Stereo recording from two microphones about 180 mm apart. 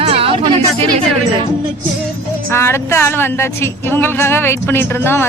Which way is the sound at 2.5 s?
15° left (ahead or behind).